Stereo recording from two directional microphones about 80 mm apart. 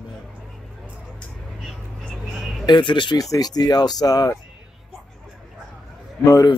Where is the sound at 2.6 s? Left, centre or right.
Left.